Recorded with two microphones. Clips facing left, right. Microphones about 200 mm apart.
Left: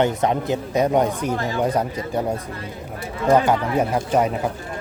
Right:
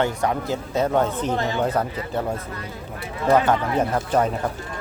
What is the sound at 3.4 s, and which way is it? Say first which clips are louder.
Speech: left 1 dB; 10° left (ahead or behind).